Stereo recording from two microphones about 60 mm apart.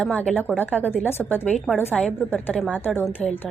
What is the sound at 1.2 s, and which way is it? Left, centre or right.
Speech, centre.